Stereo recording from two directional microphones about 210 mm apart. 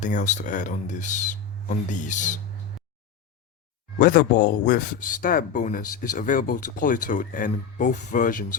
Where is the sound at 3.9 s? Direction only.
40° left (ahead or behind).